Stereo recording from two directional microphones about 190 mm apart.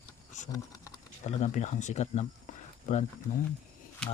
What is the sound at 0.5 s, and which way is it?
Typing, 20° left (ahead or behind).